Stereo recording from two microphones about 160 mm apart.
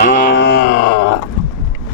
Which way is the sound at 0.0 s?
60° left (ahead or behind).